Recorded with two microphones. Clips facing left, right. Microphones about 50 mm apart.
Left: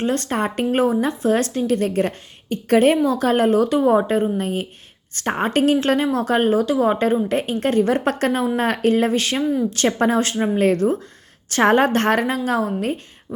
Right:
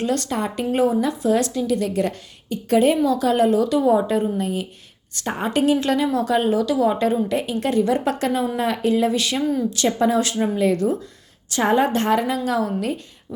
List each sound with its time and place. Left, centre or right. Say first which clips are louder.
0.0 s speech: left 2 dB; left
12.5 s speech: left 1 dB; left